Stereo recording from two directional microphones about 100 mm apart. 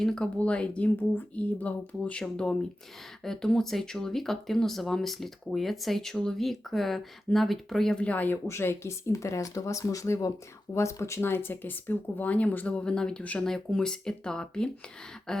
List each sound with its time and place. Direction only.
0.0 s speech: 5° left (ahead or behind)
8.4 s speech: 25° left (ahead or behind); by 15.4 s 5° left (ahead or behind)